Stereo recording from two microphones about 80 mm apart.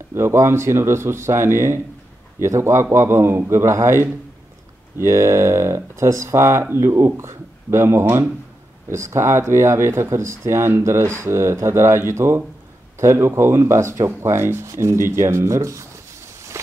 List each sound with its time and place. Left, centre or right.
0.1 s speech: right
16.5 s walk: right